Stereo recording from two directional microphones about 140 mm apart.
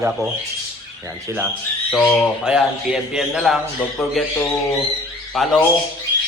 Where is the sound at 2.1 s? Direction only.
5° right (ahead or behind).